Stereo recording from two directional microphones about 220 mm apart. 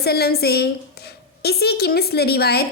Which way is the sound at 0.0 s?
45° left (ahead or behind).